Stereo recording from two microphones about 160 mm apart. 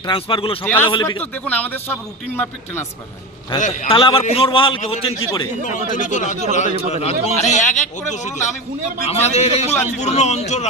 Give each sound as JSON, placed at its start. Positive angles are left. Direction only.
{"t": 0.0, "sound": "a man's voice", "side_deg": 30}
{"t": 0.6, "sound": "a man's voice", "side_deg": 10}
{"t": 3.8, "sound": "a man's voice", "side_deg": 35}
{"t": 5.9, "sound": "a man's voice", "side_deg": 50}